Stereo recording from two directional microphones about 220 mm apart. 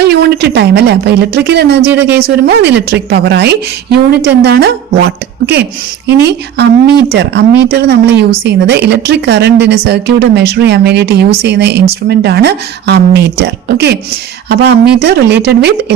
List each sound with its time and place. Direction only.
0.0 s a woman's voice: 50° right (ahead or behind)
6.1 s a woman's voice: 50° right (ahead or behind)